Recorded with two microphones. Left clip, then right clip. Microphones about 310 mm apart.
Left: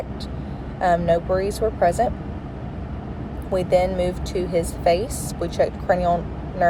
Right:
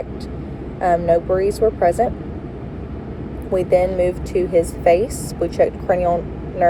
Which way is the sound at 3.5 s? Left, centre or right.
Centre.